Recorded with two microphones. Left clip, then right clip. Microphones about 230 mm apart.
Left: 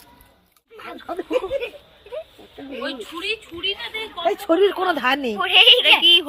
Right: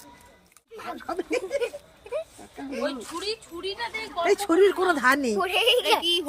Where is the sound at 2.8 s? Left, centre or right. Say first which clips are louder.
Left 1 dB; right.